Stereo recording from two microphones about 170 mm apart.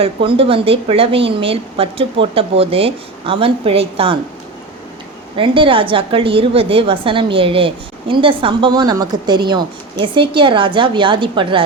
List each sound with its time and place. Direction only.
0.0 s a woman's voice: 30° right (ahead or behind)
5.4 s a woman's voice: 30° right (ahead or behind)